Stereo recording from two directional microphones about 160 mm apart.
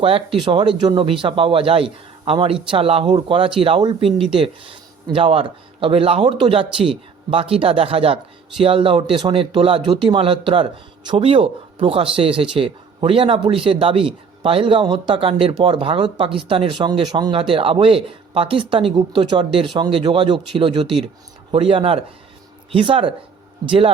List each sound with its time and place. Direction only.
0.0 s speech: 35° right (ahead or behind)